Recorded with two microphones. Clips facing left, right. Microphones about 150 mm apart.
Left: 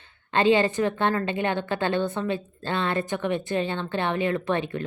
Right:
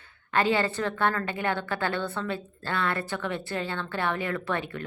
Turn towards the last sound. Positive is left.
turn(degrees=20)  # may be behind; listen again after turning